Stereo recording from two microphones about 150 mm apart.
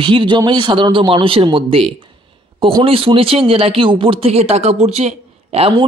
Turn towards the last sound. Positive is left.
turn(degrees=-40)  # may be behind; listen again after turning